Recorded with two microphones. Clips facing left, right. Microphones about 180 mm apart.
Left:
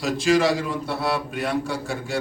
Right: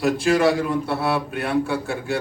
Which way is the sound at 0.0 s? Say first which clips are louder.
Right 2 dB; 60° right (ahead or behind).